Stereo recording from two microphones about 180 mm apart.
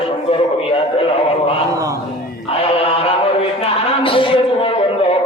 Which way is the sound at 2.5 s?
35° left (ahead or behind).